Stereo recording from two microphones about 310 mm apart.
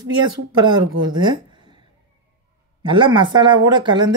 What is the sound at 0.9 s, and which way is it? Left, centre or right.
Speech, right.